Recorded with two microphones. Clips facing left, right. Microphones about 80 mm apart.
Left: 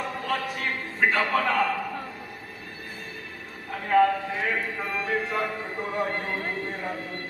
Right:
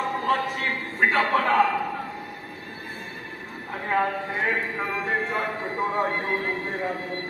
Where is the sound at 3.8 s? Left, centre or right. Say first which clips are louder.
Left 4 dB; right.